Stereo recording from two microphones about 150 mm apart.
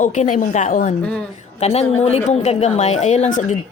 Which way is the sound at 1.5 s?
45° left (ahead or behind).